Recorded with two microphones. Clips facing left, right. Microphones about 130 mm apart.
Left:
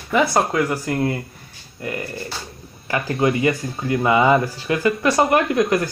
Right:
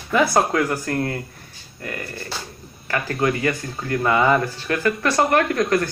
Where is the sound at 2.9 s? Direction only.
25° left (ahead or behind).